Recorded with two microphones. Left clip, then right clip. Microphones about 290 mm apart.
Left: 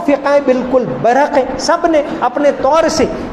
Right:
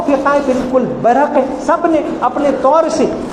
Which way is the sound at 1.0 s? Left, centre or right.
Left.